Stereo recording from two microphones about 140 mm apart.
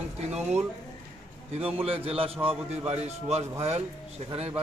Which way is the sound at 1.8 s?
45° right (ahead or behind).